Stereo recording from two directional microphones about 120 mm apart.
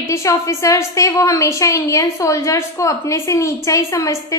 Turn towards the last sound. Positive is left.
turn(degrees=25)  # may be behind; listen again after turning